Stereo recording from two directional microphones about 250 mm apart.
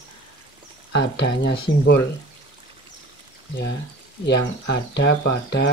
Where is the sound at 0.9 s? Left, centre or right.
Left.